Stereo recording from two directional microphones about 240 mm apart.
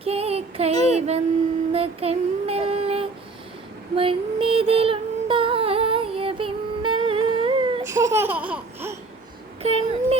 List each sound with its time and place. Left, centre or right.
0.0 s child singing: right
0.9 s a sound: right; by 9.0 s centre
9.6 s a child's voice: right